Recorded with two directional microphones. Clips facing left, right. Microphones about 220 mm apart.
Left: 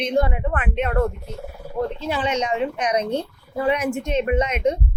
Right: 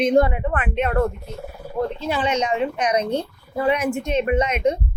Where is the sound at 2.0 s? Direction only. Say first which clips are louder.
Right 2 dB; 50° right (ahead or behind).